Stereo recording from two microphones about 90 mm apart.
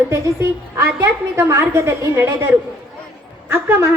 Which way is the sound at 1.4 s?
30° right (ahead or behind).